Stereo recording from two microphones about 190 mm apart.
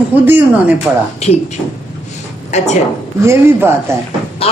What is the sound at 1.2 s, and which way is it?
Speech, 35° left (ahead or behind).